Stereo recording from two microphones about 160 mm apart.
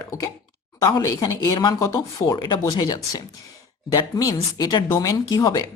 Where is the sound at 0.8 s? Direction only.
20° left (ahead or behind).